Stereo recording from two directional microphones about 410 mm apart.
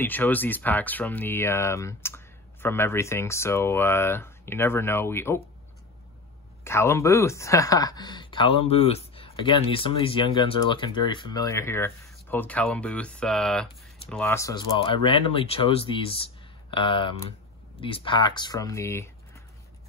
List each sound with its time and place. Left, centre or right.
0.0 s speech: centre
6.6 s speech: centre